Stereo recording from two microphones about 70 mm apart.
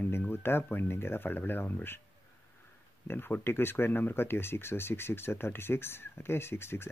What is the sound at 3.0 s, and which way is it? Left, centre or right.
Speech, left.